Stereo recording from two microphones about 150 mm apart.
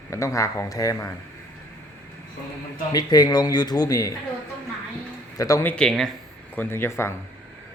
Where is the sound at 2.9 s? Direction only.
25° left (ahead or behind).